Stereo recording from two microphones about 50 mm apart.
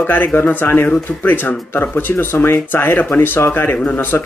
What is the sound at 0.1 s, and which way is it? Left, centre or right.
Speech, left.